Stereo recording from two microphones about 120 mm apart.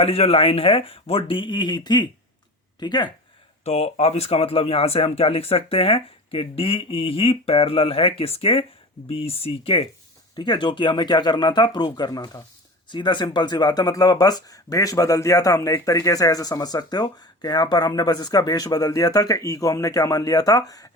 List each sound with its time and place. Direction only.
0.0 s speech: 55° left (ahead or behind); by 3.1 s 35° left (ahead or behind)
3.6 s speech: 60° left (ahead or behind)
10.3 s speech: 40° left (ahead or behind)